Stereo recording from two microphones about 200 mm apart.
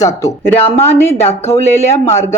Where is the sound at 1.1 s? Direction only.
30° left (ahead or behind).